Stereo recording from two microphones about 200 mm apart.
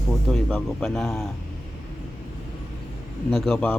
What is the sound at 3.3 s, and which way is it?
Speech, 5° left (ahead or behind).